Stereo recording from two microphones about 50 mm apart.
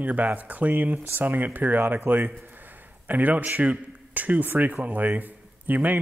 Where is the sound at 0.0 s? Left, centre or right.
Right.